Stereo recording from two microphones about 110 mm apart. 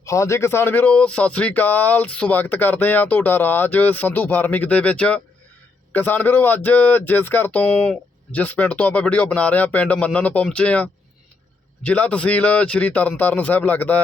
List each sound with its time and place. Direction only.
0.0 s speech: 25° left (ahead or behind)
11.9 s speech: 10° left (ahead or behind)